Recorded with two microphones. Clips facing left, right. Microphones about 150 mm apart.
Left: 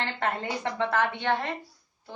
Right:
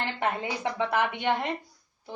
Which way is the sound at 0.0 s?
10° right (ahead or behind).